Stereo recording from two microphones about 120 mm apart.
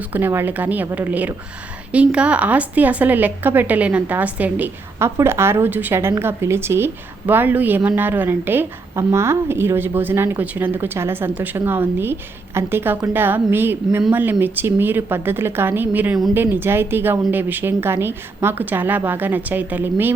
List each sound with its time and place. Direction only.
0.1 s a woman's voice: 20° right (ahead or behind)